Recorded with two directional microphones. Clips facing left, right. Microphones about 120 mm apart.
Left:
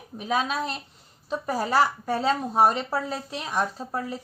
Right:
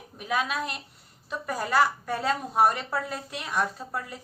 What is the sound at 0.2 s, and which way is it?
A woman's voice, 25° left (ahead or behind).